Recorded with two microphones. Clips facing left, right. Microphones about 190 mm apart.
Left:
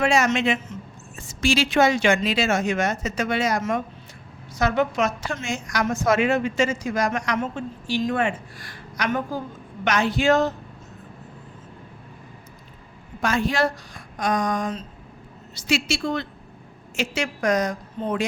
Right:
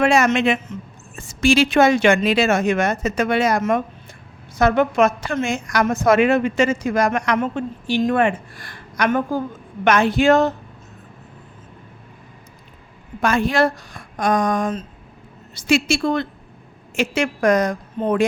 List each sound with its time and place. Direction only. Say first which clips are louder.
0.0 s a woman's voice: right 4 dB; 60° right (ahead or behind)
13.2 s a woman's voice: right 4 dB; 60° right (ahead or behind)